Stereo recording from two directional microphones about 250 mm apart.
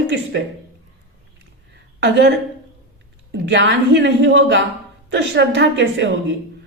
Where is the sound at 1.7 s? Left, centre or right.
Right.